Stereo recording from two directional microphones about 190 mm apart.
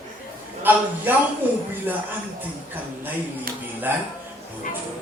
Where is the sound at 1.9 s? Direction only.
10° right (ahead or behind).